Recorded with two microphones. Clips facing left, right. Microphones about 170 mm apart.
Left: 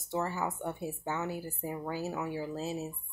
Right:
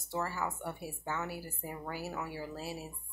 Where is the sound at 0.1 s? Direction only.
20° left (ahead or behind).